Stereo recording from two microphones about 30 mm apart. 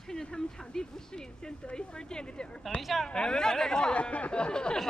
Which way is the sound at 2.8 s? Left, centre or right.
Centre.